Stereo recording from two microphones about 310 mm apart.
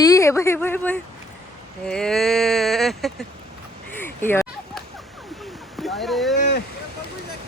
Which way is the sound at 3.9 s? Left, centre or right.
Centre.